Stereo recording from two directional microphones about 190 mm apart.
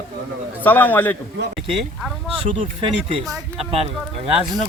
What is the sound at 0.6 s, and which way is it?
Speech, 10° left (ahead or behind).